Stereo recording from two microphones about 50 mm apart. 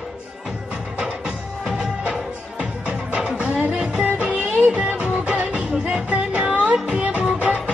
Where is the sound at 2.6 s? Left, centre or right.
Right.